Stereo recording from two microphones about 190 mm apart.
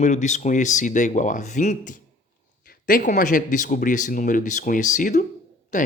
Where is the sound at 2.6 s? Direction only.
50° left (ahead or behind).